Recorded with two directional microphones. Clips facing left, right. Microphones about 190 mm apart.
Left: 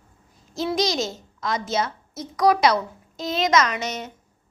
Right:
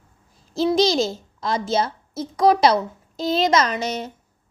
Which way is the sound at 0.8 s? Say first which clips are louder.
Right 5 dB; 30° right (ahead or behind).